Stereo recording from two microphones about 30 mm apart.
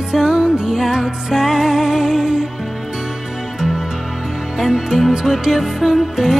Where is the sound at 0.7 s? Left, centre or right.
Centre.